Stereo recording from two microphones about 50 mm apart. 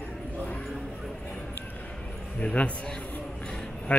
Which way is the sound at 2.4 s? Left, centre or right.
Left.